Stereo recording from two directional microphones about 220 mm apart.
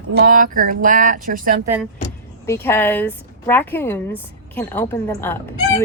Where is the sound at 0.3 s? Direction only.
40° right (ahead or behind).